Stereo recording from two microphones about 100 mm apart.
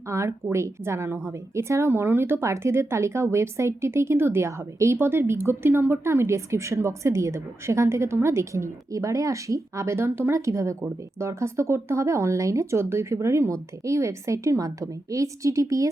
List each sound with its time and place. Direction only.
0.1 s speech: 30° right (ahead or behind)